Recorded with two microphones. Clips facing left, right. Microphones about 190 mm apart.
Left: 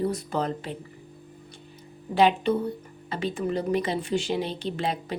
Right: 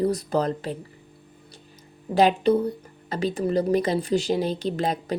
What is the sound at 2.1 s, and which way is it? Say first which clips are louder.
A woman's voice: right 3 dB; 40° right (ahead or behind).